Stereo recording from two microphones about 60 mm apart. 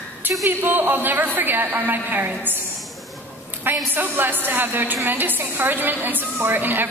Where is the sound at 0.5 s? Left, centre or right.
Right.